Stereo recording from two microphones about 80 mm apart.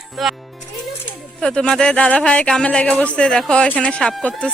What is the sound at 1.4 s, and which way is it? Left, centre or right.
Speech, centre.